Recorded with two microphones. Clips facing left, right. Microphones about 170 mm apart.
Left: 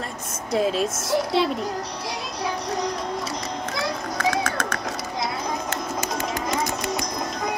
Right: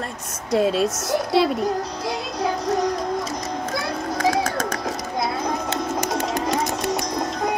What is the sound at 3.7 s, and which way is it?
Children playing, 45° right (ahead or behind).